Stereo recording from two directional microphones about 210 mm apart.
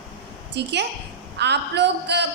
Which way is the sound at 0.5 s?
55° right (ahead or behind).